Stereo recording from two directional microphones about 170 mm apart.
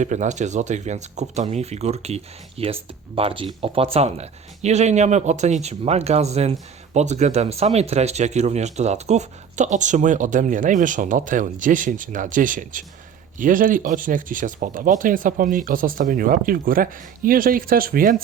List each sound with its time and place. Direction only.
0.0 s speech: 45° right (ahead or behind)